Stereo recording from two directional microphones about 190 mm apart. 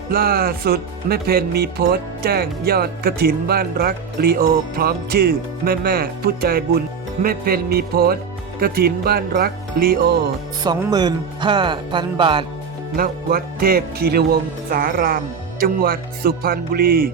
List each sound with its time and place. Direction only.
0.1 s speech: 50° right (ahead or behind)
10.6 s speech: 20° right (ahead or behind)
13.0 s speech: 50° right (ahead or behind)